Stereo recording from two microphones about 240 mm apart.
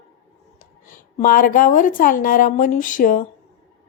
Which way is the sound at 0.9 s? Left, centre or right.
Left.